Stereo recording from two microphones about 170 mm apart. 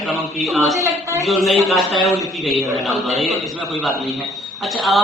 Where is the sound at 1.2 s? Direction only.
Centre (ahead or behind).